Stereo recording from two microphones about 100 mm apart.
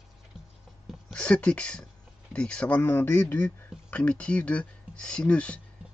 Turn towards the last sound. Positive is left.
turn(degrees=10)  # may be behind; listen again after turning